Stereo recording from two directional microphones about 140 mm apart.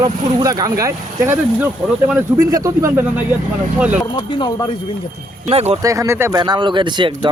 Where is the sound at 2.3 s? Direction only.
25° right (ahead or behind); by 4.0 s 10° right (ahead or behind).